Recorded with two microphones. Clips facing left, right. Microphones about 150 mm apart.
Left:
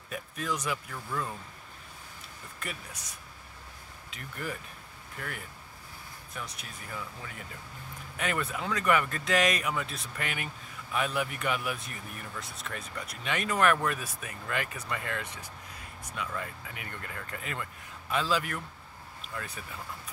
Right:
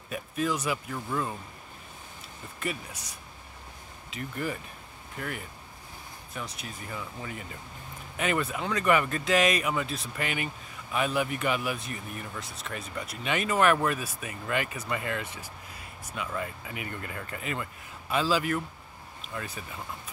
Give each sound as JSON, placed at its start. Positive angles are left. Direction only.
{"t": 0.1, "sound": "speech", "side_deg": -5}
{"t": 0.9, "sound": "speech", "side_deg": -15}
{"t": 2.6, "sound": "speech", "side_deg": 0}